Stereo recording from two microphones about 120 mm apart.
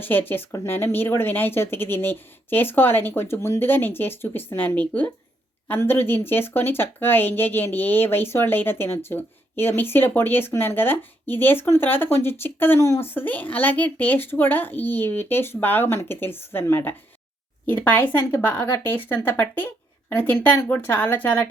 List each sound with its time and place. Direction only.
0.0 s speech: 15° left (ahead or behind)